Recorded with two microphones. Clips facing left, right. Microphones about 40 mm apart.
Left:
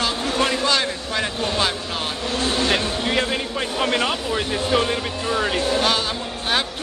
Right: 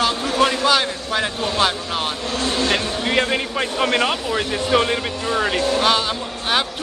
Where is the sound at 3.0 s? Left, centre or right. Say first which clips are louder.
Right 2 dB; right.